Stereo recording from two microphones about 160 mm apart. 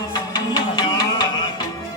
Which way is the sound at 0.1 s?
30° left (ahead or behind).